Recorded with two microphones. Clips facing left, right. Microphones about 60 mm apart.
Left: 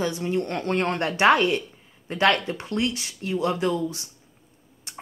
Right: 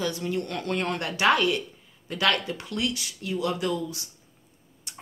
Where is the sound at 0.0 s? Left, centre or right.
Left.